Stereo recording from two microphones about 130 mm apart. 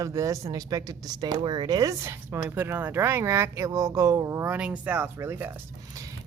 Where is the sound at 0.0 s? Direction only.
25° right (ahead or behind).